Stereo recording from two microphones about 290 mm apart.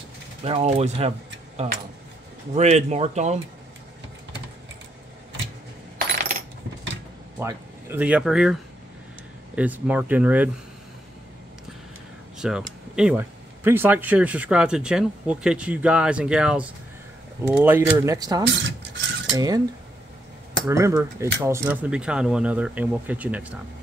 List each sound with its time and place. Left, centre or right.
0.4 s speech: right
2.5 s speech: right
7.3 s speech: centre
9.6 s speech: centre
12.4 s speech: centre
18.5 s filing: right
19.3 s speech: centre
20.6 s speech: centre